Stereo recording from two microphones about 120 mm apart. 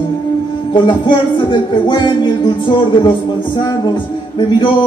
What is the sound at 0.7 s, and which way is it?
Music, 40° left (ahead or behind).